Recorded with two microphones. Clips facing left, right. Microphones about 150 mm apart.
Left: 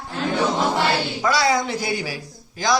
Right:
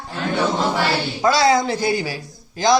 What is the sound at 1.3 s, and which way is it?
Speech, 25° right (ahead or behind).